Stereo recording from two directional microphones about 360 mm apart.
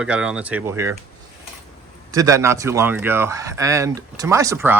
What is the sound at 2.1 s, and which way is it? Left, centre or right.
Speech, centre.